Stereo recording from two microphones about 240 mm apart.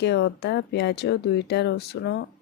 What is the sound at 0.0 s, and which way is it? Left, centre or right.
Speech, left.